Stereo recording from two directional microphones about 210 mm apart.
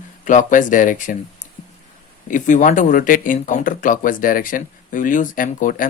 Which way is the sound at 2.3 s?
35° left (ahead or behind).